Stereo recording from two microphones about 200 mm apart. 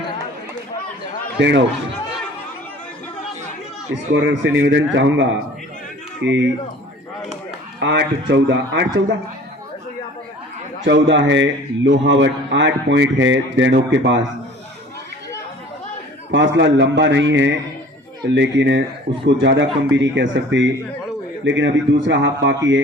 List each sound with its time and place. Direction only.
1.4 s a man's voice: 60° right (ahead or behind)
4.1 s a man's voice: 70° right (ahead or behind)
7.8 s a man's voice: 60° right (ahead or behind)
10.8 s a man's voice: 65° right (ahead or behind)
16.3 s a man's voice: 65° right (ahead or behind)